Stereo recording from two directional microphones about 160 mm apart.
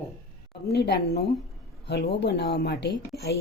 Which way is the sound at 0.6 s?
90° left.